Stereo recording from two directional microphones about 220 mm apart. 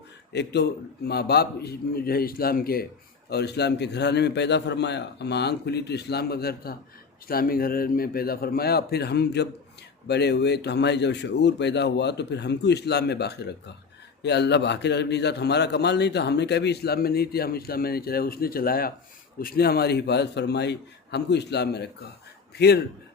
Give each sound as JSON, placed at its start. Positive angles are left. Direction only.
{"t": 0.3, "sound": "a man's voice", "side_deg": 50}